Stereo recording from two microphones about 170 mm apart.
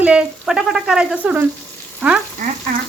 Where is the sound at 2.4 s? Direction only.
50° right (ahead or behind).